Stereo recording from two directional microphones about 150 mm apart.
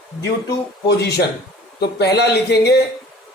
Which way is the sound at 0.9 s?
90° left.